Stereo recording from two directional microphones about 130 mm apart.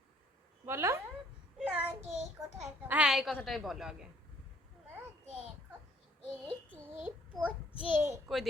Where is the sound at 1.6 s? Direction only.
15° right (ahead or behind).